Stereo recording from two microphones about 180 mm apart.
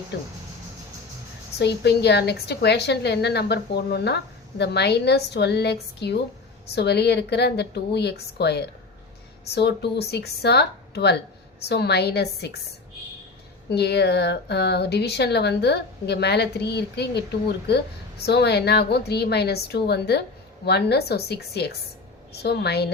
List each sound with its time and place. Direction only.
1.5 s a woman's voice: 70° left (ahead or behind)
13.7 s a woman's voice: 70° left (ahead or behind)